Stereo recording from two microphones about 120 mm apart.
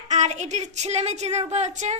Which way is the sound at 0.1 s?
75° right (ahead or behind).